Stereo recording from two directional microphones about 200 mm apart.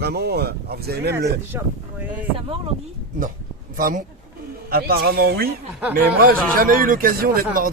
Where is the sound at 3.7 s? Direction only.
45° right (ahead or behind).